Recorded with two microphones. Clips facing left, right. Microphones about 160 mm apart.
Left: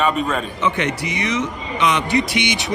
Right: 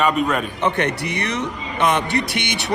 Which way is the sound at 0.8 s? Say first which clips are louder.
Even; 60° right (ahead or behind).